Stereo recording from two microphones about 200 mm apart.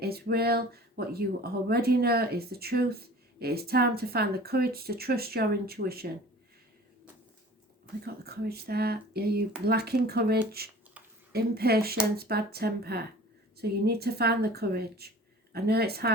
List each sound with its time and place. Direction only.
0.0 s speech: 50° right (ahead or behind)
8.0 s speech: 50° right (ahead or behind)